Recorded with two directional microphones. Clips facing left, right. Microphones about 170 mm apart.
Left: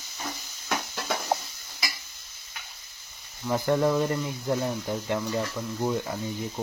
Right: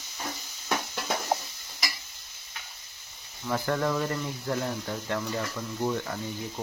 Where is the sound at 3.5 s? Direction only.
20° left (ahead or behind).